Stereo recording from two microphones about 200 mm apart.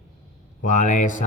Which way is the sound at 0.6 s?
40° left (ahead or behind).